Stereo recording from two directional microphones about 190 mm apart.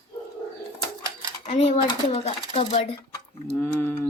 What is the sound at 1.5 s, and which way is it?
Speech, 35° left (ahead or behind).